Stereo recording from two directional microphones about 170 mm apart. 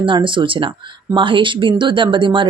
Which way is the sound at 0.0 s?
30° right (ahead or behind).